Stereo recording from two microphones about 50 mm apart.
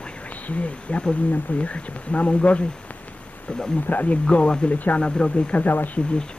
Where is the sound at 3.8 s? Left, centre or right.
Left.